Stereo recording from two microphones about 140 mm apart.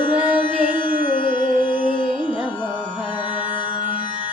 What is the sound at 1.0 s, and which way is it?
Music, 70° left (ahead or behind).